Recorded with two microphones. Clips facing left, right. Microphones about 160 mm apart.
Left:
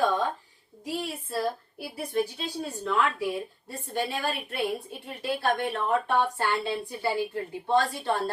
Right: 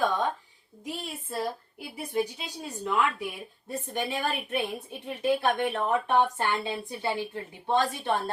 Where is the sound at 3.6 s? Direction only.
15° right (ahead or behind).